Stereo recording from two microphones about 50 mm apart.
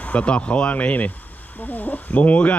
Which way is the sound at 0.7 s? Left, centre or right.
Left.